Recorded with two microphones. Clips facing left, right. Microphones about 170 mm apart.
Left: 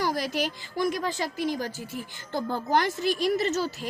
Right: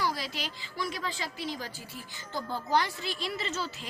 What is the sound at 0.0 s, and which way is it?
A woman's voice, 45° left (ahead or behind).